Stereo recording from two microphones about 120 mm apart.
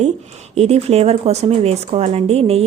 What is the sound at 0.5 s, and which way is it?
Speech, 60° right (ahead or behind).